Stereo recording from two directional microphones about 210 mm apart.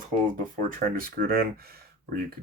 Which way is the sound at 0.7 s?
40° right (ahead or behind).